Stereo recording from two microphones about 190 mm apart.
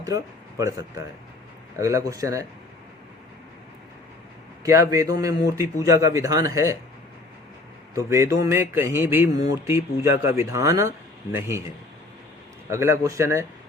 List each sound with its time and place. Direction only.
1.8 s speech: 15° right (ahead or behind)
4.6 s speech: 15° right (ahead or behind)
7.9 s speech: 15° right (ahead or behind)
12.7 s speech: 15° right (ahead or behind)